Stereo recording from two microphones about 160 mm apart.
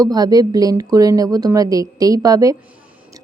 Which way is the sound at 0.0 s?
25° right (ahead or behind).